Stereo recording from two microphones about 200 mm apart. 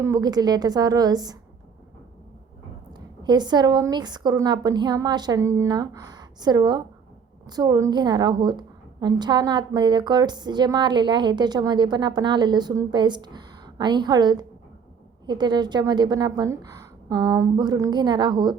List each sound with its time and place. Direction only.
0.0 s a woman's voice: 15° right (ahead or behind)
3.2 s a woman's voice: 20° right (ahead or behind)